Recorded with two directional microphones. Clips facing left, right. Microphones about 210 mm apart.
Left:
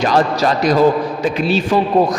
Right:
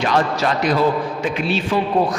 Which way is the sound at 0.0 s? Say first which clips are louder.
Left 4 dB; 35° left (ahead or behind).